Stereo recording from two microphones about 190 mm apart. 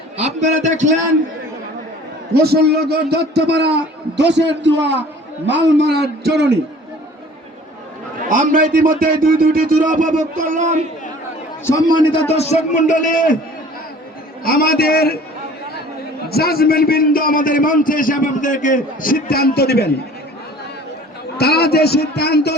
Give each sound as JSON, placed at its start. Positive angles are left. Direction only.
{"t": 0.2, "sound": "a man's voice", "side_deg": -35}
{"t": 2.3, "sound": "a man's voice", "side_deg": -55}
{"t": 8.3, "sound": "a man's voice", "side_deg": -45}
{"t": 11.6, "sound": "a man's voice", "side_deg": 15}
{"t": 12.3, "sound": "a man's voice", "side_deg": 35}
{"t": 14.4, "sound": "a man's voice", "side_deg": 50}
{"t": 16.3, "sound": "a man's voice", "side_deg": 55}
{"t": 21.3, "sound": "a man's voice", "side_deg": 55}